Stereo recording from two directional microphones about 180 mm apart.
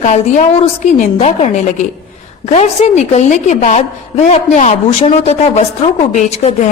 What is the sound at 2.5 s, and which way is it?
A woman's voice, 40° left (ahead or behind).